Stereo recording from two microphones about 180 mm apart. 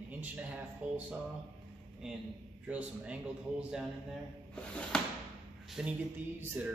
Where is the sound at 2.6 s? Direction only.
5° right (ahead or behind).